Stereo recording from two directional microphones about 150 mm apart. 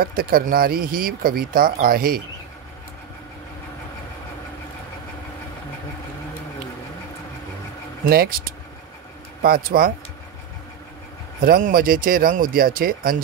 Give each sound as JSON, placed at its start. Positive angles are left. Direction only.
{"t": 0.0, "sound": "speech", "side_deg": -80}
{"t": 8.1, "sound": "speech", "side_deg": -85}
{"t": 11.4, "sound": "speech", "side_deg": -70}